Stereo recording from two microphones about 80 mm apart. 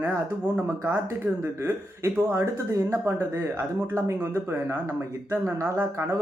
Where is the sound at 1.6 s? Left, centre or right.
Right.